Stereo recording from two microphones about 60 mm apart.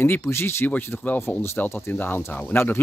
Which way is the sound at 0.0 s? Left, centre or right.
Left.